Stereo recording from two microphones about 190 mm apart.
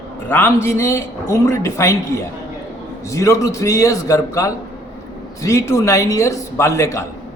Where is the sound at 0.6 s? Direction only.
15° left (ahead or behind).